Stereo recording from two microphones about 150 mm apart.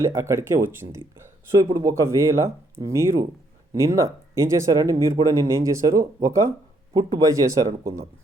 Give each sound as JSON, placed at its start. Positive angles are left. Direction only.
{"t": 0.0, "sound": "speech", "side_deg": -20}